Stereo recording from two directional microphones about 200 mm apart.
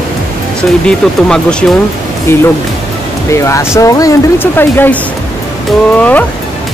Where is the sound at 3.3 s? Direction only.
15° left (ahead or behind).